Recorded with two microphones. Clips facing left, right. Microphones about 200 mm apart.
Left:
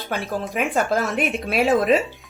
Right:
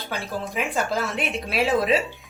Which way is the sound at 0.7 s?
50° left (ahead or behind).